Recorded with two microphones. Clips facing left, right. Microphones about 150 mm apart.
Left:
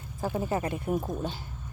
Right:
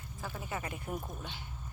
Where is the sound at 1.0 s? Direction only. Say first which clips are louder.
Left 11 dB; 40° left (ahead or behind).